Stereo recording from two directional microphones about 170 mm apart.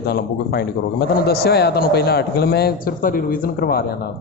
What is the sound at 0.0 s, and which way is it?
A man's voice, 70° left (ahead or behind).